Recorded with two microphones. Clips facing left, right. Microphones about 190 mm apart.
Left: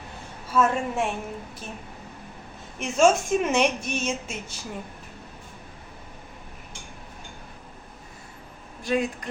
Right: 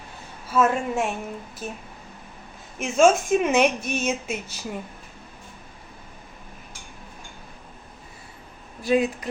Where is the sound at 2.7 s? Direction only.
Centre (ahead or behind).